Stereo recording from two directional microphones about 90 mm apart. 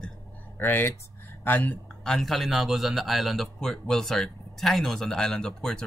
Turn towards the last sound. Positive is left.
turn(degrees=5)  # may be behind; listen again after turning